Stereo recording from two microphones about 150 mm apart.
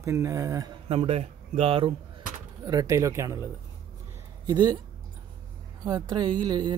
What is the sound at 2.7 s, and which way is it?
Speech, 20° right (ahead or behind).